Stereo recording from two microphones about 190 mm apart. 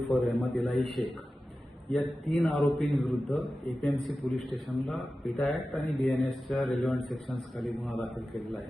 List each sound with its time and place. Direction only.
0.0 s a man's voice: centre (ahead or behind)
1.9 s a man's voice: centre (ahead or behind)